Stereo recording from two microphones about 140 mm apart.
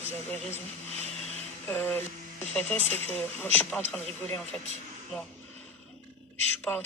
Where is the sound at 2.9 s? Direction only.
50° right (ahead or behind).